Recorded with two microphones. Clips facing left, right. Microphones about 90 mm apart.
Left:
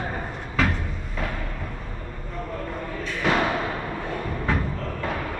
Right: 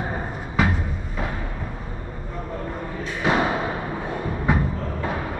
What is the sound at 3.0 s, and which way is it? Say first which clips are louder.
Thump: right 1 dB; 15° right (ahead or behind).